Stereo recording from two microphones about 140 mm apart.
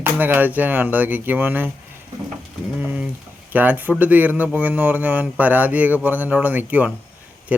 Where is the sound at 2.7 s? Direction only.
10° right (ahead or behind).